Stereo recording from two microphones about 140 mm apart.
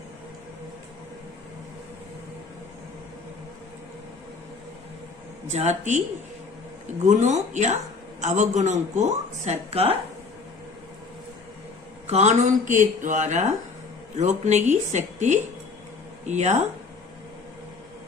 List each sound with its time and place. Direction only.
5.5 s a woman's voice: 55° right (ahead or behind)
12.1 s a woman's voice: 55° right (ahead or behind)